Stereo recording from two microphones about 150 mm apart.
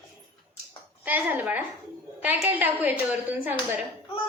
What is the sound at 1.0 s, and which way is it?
A woman's voice, 10° right (ahead or behind).